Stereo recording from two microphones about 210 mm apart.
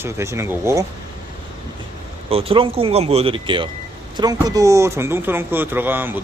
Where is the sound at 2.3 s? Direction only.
25° right (ahead or behind); by 6.2 s 10° right (ahead or behind).